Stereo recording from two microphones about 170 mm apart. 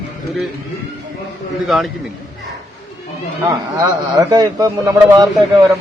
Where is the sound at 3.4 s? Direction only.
20° right (ahead or behind).